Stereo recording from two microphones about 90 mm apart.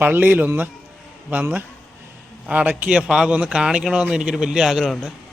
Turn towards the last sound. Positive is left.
turn(degrees=-5)  # may be behind; listen again after turning